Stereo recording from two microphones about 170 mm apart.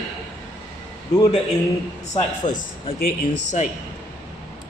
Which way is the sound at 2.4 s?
25° left (ahead or behind).